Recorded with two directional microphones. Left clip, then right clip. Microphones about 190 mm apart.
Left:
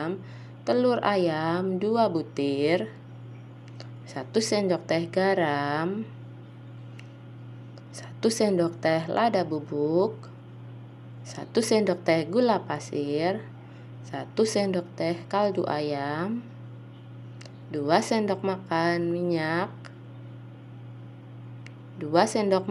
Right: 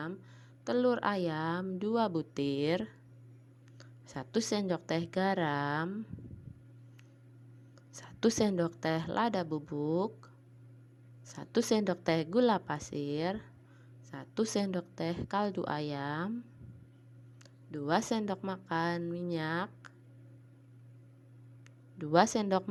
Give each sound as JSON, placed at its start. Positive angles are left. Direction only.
{"t": 0.6, "sound": "speech", "side_deg": -55}
{"t": 7.9, "sound": "speech", "side_deg": -55}
{"t": 11.3, "sound": "a woman's voice", "side_deg": -55}
{"t": 17.7, "sound": "a woman's voice", "side_deg": -55}
{"t": 21.9, "sound": "a woman's voice", "side_deg": -55}